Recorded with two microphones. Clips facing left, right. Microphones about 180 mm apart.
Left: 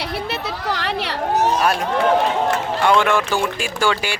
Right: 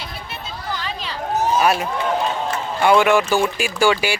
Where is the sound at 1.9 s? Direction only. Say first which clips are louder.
Left 4 dB; 70° left (ahead or behind).